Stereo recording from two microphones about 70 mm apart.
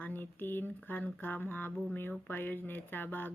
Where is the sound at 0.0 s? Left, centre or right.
Left.